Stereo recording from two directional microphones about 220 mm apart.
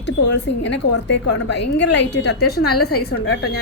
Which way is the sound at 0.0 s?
50° left (ahead or behind).